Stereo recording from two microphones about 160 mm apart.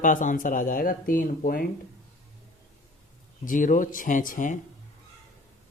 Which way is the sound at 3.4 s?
55° left (ahead or behind).